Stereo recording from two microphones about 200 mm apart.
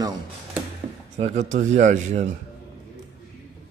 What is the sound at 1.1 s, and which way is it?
Speech, 35° right (ahead or behind).